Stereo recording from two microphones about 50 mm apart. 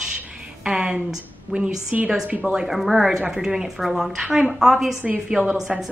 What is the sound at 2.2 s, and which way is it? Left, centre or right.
Speech, right.